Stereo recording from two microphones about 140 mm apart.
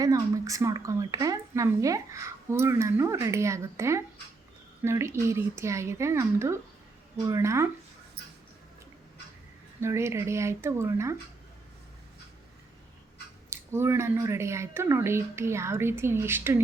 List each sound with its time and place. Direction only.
0.0 s a woman's voice: 25° right (ahead or behind)
9.8 s a woman's voice: 20° right (ahead or behind)
13.5 s a woman's voice: 20° right (ahead or behind)